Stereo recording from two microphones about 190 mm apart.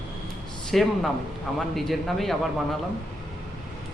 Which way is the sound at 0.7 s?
Centre (ahead or behind).